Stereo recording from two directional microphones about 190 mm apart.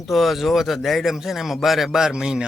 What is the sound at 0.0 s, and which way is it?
Speech, centre (ahead or behind).